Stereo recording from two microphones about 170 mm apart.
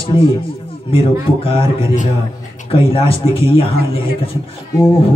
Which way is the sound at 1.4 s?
35° left (ahead or behind).